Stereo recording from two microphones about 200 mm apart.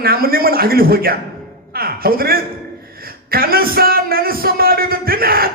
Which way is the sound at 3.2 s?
50° right (ahead or behind).